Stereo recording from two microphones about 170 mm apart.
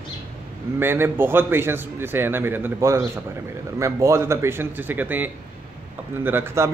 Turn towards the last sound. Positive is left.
turn(degrees=-15)  # may be behind; listen again after turning